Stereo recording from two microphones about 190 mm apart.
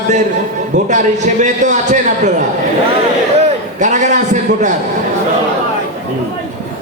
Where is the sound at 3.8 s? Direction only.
40° right (ahead or behind).